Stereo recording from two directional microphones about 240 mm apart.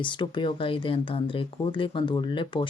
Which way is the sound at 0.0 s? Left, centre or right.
Centre.